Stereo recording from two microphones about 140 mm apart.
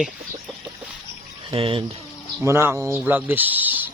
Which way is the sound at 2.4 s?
20° right (ahead or behind).